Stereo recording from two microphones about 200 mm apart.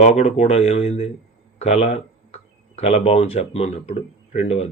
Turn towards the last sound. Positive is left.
turn(degrees=30)  # may be behind; listen again after turning